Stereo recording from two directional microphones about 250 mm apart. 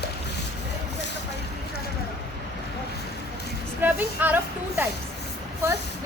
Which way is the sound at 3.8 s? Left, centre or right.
Centre.